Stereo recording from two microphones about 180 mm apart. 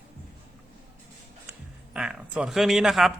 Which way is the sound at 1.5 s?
5° right (ahead or behind).